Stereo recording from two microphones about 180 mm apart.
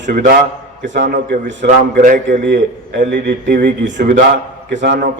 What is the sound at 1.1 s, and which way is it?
Speech, 70° right (ahead or behind).